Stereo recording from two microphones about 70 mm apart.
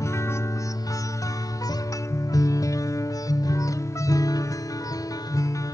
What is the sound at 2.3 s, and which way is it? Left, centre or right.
Music, left.